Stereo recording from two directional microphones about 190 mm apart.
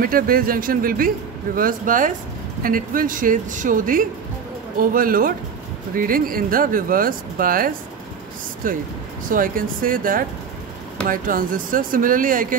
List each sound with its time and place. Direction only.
0.0 s a man's voice: 50° right (ahead or behind)